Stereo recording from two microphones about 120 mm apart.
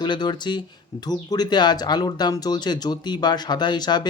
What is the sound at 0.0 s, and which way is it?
Speech, 35° left (ahead or behind).